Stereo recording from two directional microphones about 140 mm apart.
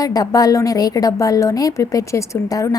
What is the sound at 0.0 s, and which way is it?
A woman's voice, 25° left (ahead or behind).